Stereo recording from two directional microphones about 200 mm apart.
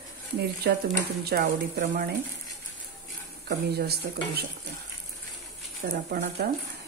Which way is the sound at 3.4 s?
50° right (ahead or behind).